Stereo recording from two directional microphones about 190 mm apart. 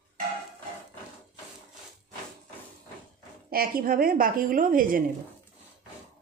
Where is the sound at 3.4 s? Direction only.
50° right (ahead or behind).